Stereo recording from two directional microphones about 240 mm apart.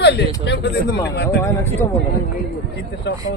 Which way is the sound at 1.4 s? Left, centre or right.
Centre.